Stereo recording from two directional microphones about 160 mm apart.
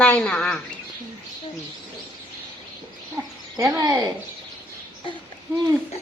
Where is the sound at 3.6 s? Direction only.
20° right (ahead or behind).